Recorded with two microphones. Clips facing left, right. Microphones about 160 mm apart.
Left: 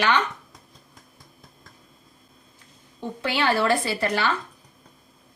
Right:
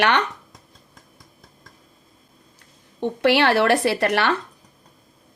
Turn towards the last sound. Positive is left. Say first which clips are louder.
# right 5 dB
turn(degrees=-70)  # may be behind; listen again after turning